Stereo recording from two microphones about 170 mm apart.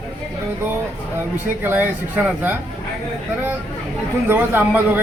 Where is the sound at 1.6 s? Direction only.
10° right (ahead or behind).